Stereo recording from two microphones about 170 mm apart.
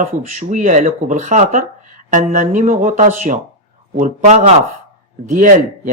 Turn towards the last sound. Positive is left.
turn(degrees=-50)  # may be behind; listen again after turning